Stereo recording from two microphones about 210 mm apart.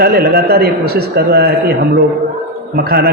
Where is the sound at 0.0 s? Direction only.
50° right (ahead or behind).